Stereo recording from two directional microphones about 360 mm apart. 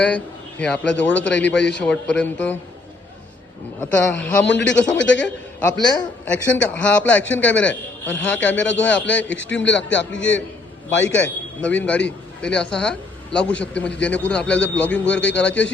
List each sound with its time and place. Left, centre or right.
0.6 s a man's voice: centre
3.8 s a man's voice: centre
9.6 s a man's voice: left
11.0 s a man's voice: centre